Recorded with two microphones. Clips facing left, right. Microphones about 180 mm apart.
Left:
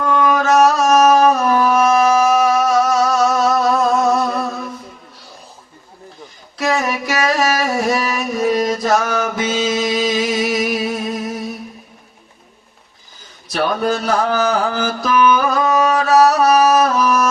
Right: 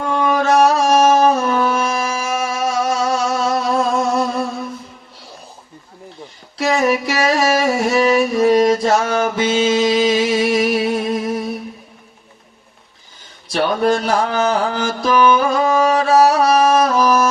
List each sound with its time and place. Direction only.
0.1 s music: 30° right (ahead or behind)
2.5 s a sound: 30° right (ahead or behind)
6.6 s music: 30° right (ahead or behind)
13.5 s mantra: 30° right (ahead or behind)